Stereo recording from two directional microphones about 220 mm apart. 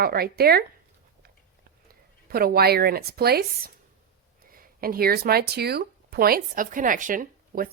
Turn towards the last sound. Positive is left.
turn(degrees=-40)  # may be behind; listen again after turning